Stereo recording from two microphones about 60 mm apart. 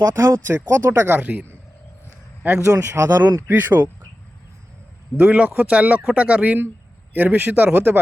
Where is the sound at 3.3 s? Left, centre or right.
Right.